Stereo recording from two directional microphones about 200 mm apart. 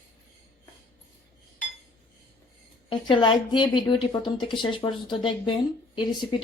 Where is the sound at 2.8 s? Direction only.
25° left (ahead or behind).